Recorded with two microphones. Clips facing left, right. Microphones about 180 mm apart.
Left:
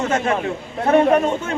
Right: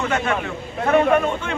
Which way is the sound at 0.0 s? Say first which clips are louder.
Left 3 dB; 35° left (ahead or behind).